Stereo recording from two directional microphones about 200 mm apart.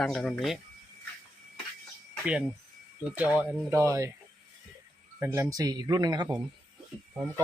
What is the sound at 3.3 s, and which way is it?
Speech, 15° right (ahead or behind).